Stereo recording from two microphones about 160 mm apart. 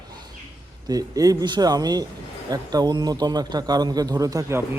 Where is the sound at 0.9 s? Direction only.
25° right (ahead or behind).